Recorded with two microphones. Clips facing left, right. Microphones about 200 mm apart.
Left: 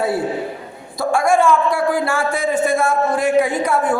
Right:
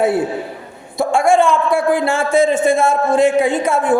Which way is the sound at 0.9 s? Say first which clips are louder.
Right 3 dB; 25° right (ahead or behind).